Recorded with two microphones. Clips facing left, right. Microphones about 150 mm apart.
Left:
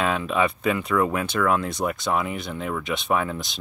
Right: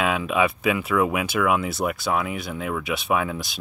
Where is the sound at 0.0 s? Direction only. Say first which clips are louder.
Right 1 dB; 5° right (ahead or behind).